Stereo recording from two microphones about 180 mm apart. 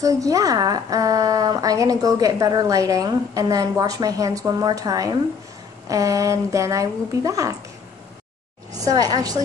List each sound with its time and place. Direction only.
0.0 s a woman's voice: 20° right (ahead or behind)
8.7 s a woman's voice: 20° right (ahead or behind)